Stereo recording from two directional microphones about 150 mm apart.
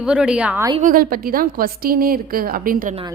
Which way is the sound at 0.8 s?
75° right (ahead or behind).